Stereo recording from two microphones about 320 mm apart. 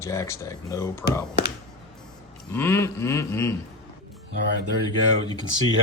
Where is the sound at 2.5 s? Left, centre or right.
Centre.